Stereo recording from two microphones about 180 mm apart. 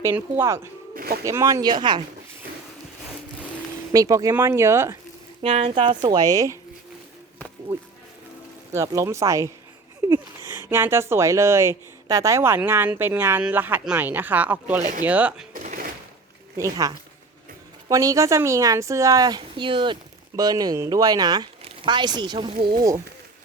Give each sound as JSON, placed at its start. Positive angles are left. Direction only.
{"t": 0.0, "sound": "speech", "side_deg": -15}
{"t": 0.9, "sound": "a sound", "side_deg": -60}
{"t": 1.2, "sound": "speech", "side_deg": -15}
{"t": 3.9, "sound": "speech", "side_deg": -20}
{"t": 5.4, "sound": "speech", "side_deg": -30}
{"t": 8.7, "sound": "speech", "side_deg": -15}
{"t": 15.5, "sound": "a sound", "side_deg": -50}
{"t": 16.6, "sound": "speech", "side_deg": -20}
{"t": 22.5, "sound": "speech", "side_deg": -55}